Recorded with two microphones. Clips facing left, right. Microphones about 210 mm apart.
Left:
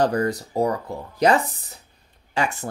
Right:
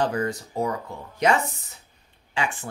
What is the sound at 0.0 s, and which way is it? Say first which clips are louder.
Speech: left 4 dB; 40° left (ahead or behind).